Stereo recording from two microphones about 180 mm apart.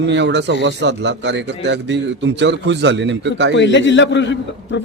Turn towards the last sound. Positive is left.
turn(degrees=90)